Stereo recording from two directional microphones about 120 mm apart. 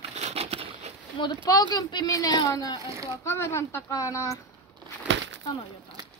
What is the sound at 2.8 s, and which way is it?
Speech, 25° right (ahead or behind).